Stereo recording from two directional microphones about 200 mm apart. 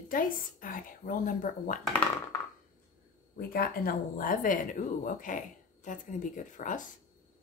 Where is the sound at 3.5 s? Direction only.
45° left (ahead or behind).